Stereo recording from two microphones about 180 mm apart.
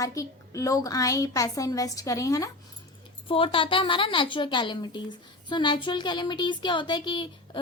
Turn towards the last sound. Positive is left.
turn(degrees=25)  # may be behind; listen again after turning